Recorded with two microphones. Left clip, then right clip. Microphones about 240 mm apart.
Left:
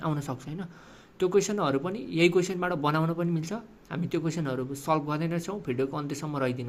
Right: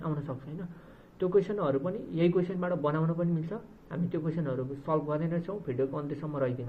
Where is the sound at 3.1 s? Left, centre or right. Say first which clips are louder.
Left 2 dB; left.